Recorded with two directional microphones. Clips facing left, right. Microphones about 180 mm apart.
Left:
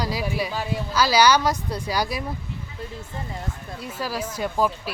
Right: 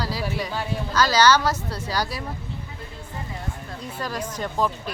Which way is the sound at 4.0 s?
5° left (ahead or behind).